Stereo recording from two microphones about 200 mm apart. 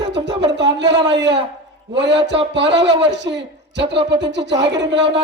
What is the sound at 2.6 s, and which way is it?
Speech, 60° right (ahead or behind).